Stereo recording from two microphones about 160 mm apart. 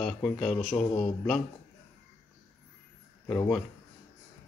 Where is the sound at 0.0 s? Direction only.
5° left (ahead or behind).